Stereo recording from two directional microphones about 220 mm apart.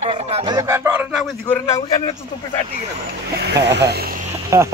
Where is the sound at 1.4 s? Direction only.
10° left (ahead or behind).